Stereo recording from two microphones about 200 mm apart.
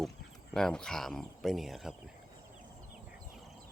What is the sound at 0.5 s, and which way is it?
Speech, 5° left (ahead or behind).